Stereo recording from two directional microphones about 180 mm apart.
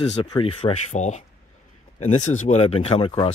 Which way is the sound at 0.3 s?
30° left (ahead or behind).